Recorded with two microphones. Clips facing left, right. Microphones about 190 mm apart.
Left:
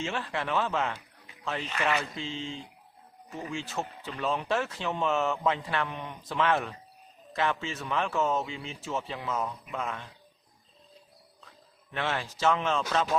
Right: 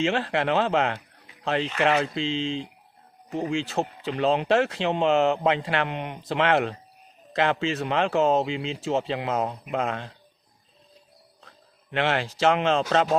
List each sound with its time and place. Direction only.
0.0 s speech: 80° right
11.9 s speech: 75° right (ahead or behind)